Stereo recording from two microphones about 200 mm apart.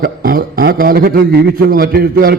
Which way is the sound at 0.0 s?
45° right (ahead or behind).